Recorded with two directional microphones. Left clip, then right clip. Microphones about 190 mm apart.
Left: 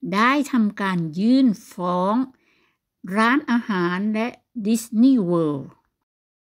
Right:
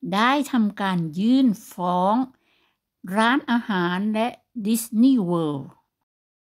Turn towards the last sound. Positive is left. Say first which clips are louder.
# left 3 dB
turn(degrees=0)  # may be behind; listen again after turning